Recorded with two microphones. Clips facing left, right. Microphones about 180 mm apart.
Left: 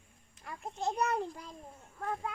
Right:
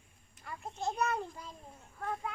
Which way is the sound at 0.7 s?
15° left (ahead or behind).